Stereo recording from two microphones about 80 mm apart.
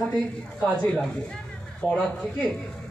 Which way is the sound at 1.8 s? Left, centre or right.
Left.